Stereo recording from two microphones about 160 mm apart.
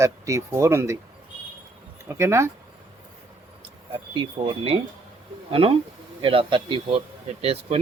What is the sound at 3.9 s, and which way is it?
Speech, 35° right (ahead or behind).